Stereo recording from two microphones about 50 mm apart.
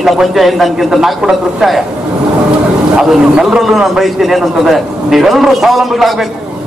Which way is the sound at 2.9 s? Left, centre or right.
Centre.